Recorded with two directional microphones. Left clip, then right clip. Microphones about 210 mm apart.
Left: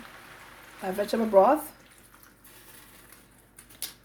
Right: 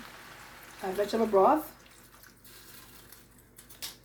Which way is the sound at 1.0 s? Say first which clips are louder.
Left 4 dB; 55° left (ahead or behind).